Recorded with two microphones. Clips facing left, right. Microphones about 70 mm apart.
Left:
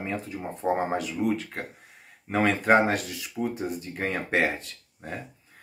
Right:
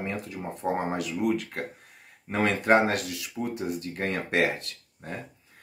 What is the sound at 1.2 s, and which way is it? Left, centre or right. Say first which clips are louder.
Speech: right 1 dB; centre.